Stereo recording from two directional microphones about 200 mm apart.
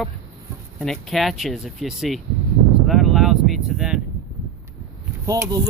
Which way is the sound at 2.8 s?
Centre (ahead or behind).